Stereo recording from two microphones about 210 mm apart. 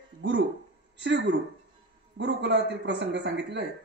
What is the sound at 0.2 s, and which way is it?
A woman's voice, 55° right (ahead or behind).